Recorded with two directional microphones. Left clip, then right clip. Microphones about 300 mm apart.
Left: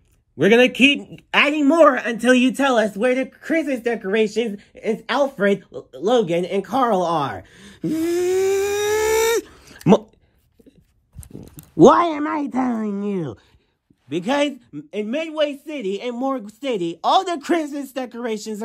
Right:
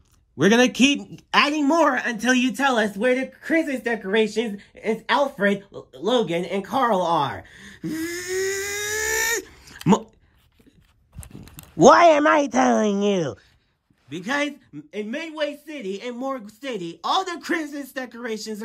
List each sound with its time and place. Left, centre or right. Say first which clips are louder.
0.7 s speech: left 4 dB; centre
1.4 s speech: left 5 dB; centre
2.3 s a man's voice: left 5 dB; right
2.7 s speech: left 3 dB; centre
11.1 s a sound: left 4 dB; centre
11.9 s speech: right 4 dB; centre
14.0 s speech: left 5 dB; centre